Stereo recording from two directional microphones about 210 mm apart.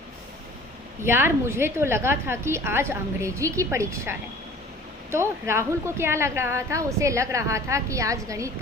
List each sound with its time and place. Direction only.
1.0 s a woman's voice: 10° right (ahead or behind)